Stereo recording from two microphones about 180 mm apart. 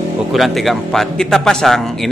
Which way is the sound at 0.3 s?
Centre (ahead or behind).